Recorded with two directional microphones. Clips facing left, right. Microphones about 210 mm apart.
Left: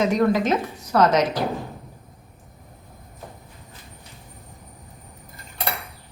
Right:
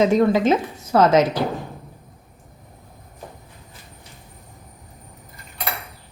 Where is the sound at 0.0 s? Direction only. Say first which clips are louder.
Right 3 dB; 25° right (ahead or behind).